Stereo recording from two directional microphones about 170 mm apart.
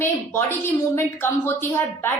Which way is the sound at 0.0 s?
15° left (ahead or behind).